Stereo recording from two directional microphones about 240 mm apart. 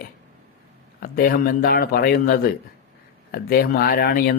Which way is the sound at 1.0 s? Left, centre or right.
Left.